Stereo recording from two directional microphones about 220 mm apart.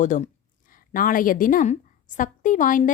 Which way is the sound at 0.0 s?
35° left (ahead or behind).